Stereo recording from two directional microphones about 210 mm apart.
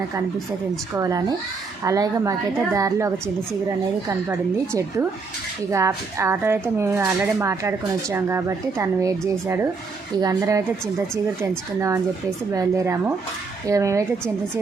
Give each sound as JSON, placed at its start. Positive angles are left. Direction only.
{"t": 0.9, "sound": "speech", "side_deg": -15}
{"t": 4.3, "sound": "speech", "side_deg": -15}
{"t": 12.5, "sound": "speech", "side_deg": -15}